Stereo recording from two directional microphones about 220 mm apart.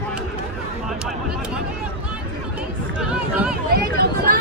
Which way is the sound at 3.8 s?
45° right (ahead or behind).